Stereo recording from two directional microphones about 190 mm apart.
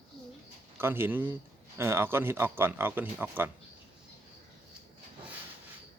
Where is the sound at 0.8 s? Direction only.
10° right (ahead or behind).